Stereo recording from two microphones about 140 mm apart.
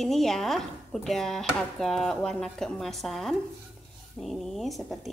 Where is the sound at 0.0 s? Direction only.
Centre (ahead or behind).